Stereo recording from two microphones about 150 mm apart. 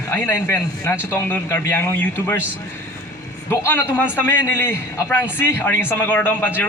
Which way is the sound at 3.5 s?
15° left (ahead or behind).